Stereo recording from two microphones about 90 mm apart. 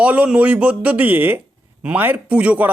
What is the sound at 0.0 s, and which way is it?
Speech, 15° right (ahead or behind).